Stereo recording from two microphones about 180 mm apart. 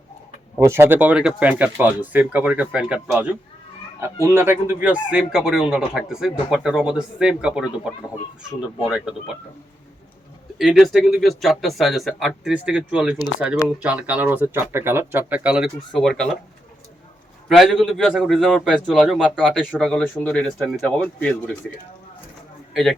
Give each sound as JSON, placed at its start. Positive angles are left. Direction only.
{"t": 0.6, "sound": "a man's voice", "side_deg": -15}
{"t": 8.8, "sound": "a man's voice", "side_deg": -5}
{"t": 10.6, "sound": "a man's voice", "side_deg": 0}
{"t": 17.5, "sound": "a man's voice", "side_deg": 0}
{"t": 22.7, "sound": "a man's voice", "side_deg": 0}